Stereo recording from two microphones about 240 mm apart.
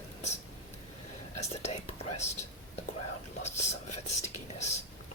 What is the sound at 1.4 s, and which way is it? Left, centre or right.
Whispering, left.